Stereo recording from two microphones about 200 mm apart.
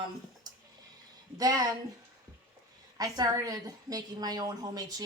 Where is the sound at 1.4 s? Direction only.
20° right (ahead or behind).